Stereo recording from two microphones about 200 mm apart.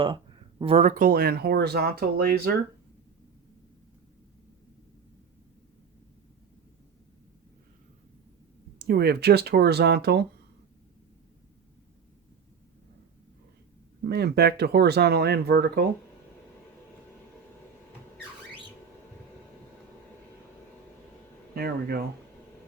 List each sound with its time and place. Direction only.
0.6 s speech: 30° right (ahead or behind); by 2.6 s 50° right (ahead or behind)
8.9 s speech: 50° right (ahead or behind)
14.0 s speech: 55° right (ahead or behind)
21.5 s speech: 50° right (ahead or behind)